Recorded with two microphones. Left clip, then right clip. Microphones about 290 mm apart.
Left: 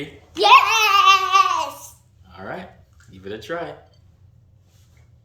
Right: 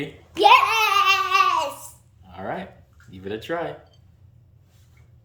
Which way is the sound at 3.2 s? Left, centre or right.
Right.